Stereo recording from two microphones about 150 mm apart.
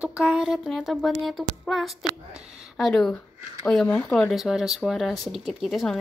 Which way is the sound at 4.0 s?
15° left (ahead or behind).